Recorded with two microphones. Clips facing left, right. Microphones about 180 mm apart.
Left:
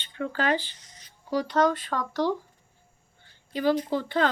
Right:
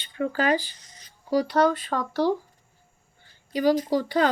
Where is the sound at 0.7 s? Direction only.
40° right (ahead or behind).